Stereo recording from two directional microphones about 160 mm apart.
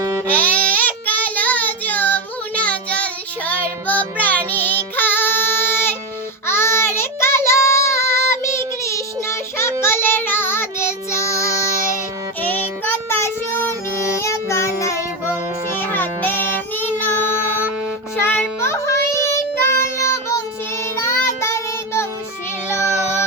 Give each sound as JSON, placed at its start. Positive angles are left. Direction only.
{"t": 0.3, "sound": "child singing", "side_deg": 10}
{"t": 12.8, "sound": "child singing", "side_deg": 15}
{"t": 18.3, "sound": "child singing", "side_deg": 15}